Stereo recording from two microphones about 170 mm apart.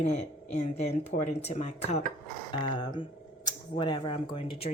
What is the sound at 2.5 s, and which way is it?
Speech, 25° left (ahead or behind).